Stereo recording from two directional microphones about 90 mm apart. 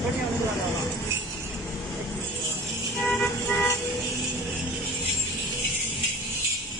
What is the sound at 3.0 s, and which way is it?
Toot, 10° left (ahead or behind).